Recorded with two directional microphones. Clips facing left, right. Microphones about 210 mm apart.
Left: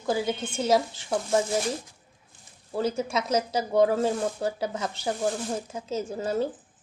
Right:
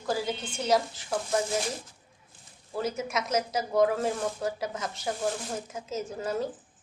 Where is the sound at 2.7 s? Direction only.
30° left (ahead or behind).